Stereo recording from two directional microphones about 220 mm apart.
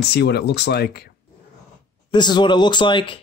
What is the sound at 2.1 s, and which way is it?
Speech, 20° left (ahead or behind).